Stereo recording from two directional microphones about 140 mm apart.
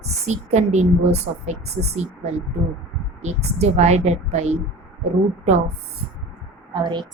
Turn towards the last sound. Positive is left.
turn(degrees=-30)  # may be behind; listen again after turning